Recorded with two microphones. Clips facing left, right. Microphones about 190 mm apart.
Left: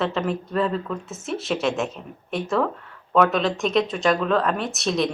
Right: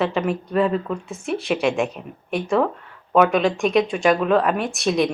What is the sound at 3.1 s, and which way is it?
Speech, 10° right (ahead or behind).